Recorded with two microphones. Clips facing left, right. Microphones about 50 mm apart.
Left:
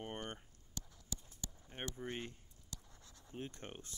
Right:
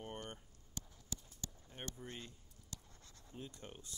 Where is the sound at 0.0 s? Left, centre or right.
Left.